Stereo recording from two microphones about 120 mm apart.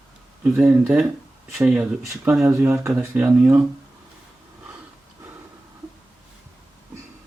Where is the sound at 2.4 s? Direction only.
25° right (ahead or behind).